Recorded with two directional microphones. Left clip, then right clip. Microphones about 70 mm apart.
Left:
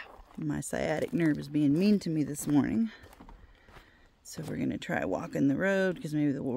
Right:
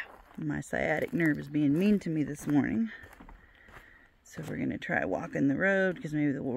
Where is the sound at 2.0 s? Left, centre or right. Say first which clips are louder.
Even; left.